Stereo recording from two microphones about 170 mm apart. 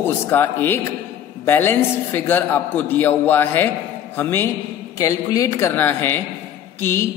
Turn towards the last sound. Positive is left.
turn(degrees=15)  # may be behind; listen again after turning